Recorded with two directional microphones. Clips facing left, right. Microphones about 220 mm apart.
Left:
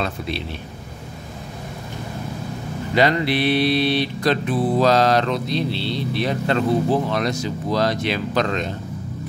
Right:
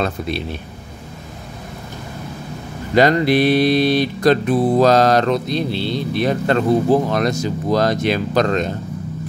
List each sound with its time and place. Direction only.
2.9 s music: 45° right (ahead or behind)